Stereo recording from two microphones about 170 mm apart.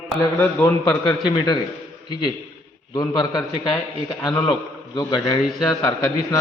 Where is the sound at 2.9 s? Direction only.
20° left (ahead or behind).